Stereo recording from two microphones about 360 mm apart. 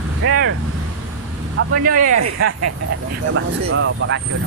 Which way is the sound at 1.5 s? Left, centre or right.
Right.